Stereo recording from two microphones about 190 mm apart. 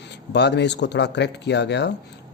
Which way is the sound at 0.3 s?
65° left (ahead or behind).